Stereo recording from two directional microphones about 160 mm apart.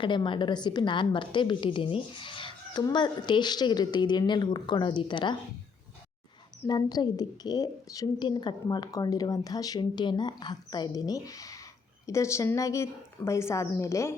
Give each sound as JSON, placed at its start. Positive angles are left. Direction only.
{"t": 0.0, "sound": "a woman's voice", "side_deg": 30}
{"t": 6.7, "sound": "a woman's voice", "side_deg": 25}